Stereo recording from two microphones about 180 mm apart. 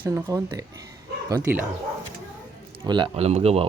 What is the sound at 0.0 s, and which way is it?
Speech, 15° right (ahead or behind).